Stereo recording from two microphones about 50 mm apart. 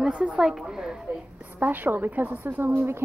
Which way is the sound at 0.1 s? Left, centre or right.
Right.